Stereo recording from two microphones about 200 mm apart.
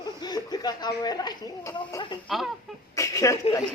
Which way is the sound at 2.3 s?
Centre (ahead or behind).